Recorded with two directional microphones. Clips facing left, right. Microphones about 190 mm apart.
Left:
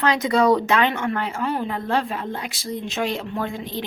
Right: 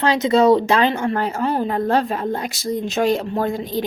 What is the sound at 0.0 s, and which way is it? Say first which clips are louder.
Speech: right 4 dB; 25° right (ahead or behind).